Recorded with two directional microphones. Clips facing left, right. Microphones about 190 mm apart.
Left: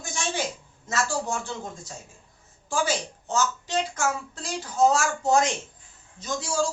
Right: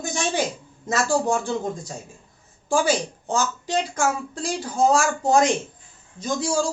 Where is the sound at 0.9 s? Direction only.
15° right (ahead or behind).